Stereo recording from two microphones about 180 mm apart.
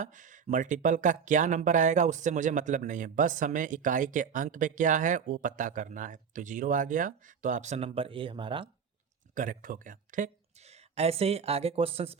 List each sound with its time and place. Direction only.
0.0 s speech: 45° right (ahead or behind); by 8.7 s 30° right (ahead or behind)
9.3 s speech: 45° right (ahead or behind)
10.7 s speech: 35° right (ahead or behind)